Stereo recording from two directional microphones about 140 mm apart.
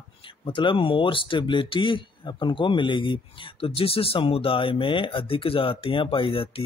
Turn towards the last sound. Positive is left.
turn(degrees=40)  # may be behind; listen again after turning